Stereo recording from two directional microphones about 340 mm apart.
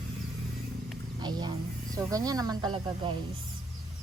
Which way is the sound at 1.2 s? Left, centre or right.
Centre.